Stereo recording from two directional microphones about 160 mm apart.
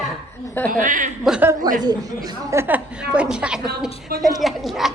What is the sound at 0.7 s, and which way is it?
Speech, 55° right (ahead or behind).